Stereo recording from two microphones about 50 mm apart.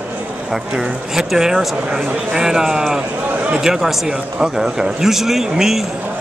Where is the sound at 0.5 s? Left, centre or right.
Centre.